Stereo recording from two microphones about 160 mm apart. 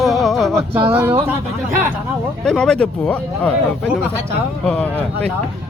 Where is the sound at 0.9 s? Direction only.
15° right (ahead or behind).